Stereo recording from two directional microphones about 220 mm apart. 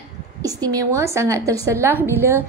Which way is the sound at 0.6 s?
15° right (ahead or behind).